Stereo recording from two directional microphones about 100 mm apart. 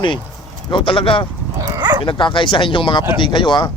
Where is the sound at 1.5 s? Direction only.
40° right (ahead or behind).